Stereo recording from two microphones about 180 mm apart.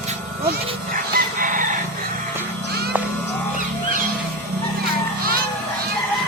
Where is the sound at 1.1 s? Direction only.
50° right (ahead or behind).